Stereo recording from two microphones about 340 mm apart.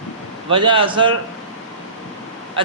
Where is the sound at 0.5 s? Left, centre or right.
Centre.